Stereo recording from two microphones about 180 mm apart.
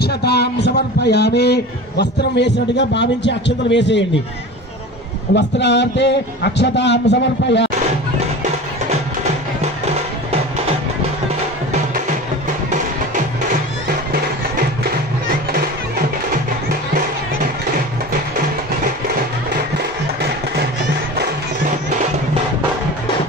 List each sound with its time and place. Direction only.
0.0 s a man's voice: 65° left (ahead or behind); by 4.0 s 80° left
5.3 s a man's voice: 75° left (ahead or behind)